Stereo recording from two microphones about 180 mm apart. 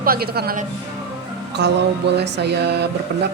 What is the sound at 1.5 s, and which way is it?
Mantra, 70° right (ahead or behind).